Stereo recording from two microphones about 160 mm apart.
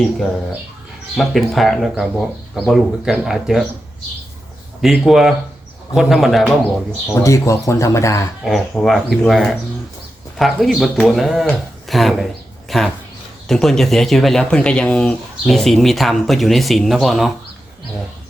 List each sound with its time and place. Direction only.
1.1 s speech: centre (ahead or behind)
4.8 s speech: 5° right (ahead or behind)
7.1 s speech: 20° left (ahead or behind)
8.4 s speech: centre (ahead or behind)